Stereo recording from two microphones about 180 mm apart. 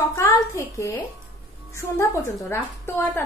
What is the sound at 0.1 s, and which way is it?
A woman's voice, 15° left (ahead or behind).